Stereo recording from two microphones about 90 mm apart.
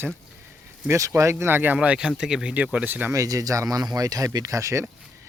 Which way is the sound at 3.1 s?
40° right (ahead or behind).